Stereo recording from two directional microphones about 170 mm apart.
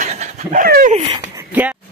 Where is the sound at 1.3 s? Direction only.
10° right (ahead or behind).